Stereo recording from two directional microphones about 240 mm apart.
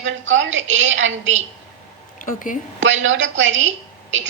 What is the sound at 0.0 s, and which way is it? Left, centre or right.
A woman's voice, right.